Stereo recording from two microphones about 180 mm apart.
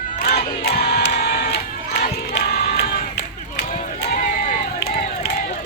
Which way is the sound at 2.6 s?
35° left (ahead or behind).